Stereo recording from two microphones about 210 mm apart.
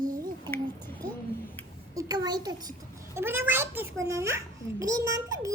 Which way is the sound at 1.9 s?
15° right (ahead or behind).